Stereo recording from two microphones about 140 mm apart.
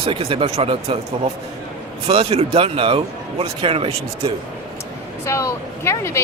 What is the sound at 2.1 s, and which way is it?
Speech, 45° right (ahead or behind).